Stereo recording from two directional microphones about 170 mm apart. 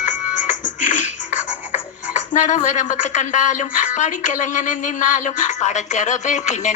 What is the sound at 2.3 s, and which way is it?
Speech, 50° left (ahead or behind).